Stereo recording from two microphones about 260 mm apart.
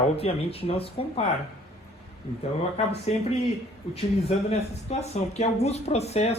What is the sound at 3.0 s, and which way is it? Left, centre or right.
Speech, left.